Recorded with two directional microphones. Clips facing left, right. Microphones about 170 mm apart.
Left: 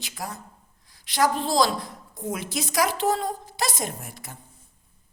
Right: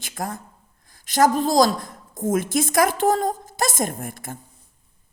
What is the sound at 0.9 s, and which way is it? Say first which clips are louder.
A woman's voice: right 5 dB; 45° right (ahead or behind).